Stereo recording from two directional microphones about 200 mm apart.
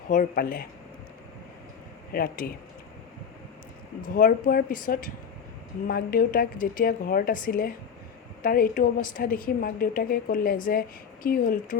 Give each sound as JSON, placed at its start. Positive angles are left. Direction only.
{"t": 0.1, "sound": "a woman's voice", "side_deg": 45}
{"t": 2.1, "sound": "a woman's voice", "side_deg": 45}
{"t": 4.1, "sound": "a woman's voice", "side_deg": 45}